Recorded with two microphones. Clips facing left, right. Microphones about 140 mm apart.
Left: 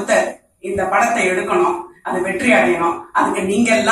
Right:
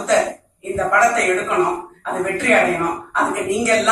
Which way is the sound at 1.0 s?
70° left (ahead or behind).